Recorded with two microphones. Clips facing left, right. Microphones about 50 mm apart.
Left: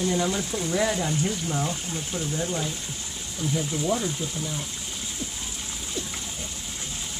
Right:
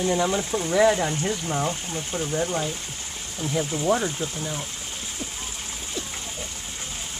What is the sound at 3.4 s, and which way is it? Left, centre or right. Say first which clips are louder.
Speech: right 3 dB; right.